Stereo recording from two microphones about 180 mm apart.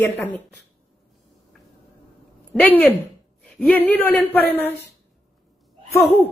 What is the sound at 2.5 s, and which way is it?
A woman's voice, 10° left (ahead or behind).